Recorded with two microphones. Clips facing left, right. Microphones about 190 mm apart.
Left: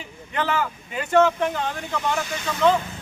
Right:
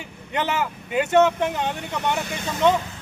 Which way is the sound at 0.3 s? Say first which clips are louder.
Even; 20° right (ahead or behind).